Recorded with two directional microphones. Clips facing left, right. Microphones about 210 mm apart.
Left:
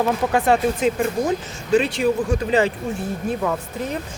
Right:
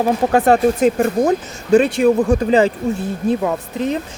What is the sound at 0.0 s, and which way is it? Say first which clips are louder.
Speech: right 5 dB; 40° right (ahead or behind).